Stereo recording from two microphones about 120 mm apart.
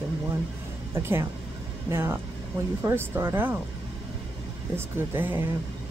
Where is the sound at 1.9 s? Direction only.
20° right (ahead or behind).